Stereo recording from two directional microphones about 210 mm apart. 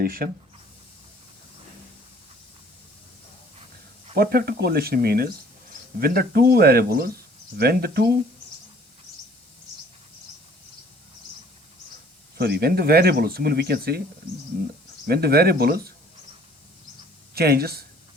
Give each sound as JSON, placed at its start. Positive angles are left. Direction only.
{"t": 0.0, "sound": "speech", "side_deg": -45}
{"t": 4.1, "sound": "speech", "side_deg": -45}
{"t": 12.4, "sound": "speech", "side_deg": -50}
{"t": 15.0, "sound": "speech", "side_deg": -50}
{"t": 17.3, "sound": "speech", "side_deg": -50}